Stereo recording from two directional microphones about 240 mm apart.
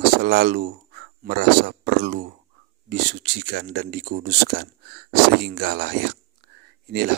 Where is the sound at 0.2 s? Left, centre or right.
Right.